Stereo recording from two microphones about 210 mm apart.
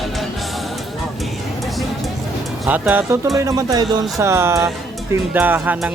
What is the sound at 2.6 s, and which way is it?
Speech, 10° right (ahead or behind).